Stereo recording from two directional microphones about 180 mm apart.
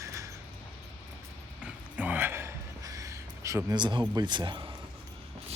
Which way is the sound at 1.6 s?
10° right (ahead or behind).